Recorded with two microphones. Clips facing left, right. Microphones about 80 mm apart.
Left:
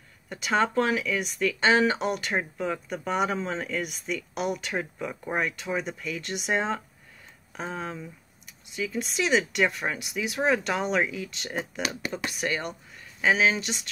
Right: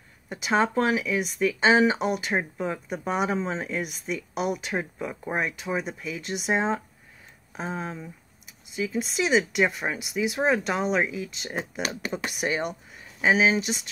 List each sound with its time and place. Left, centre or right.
0.3 s speech: centre
11.8 s speech: right
12.3 s speech: centre
13.6 s speech: centre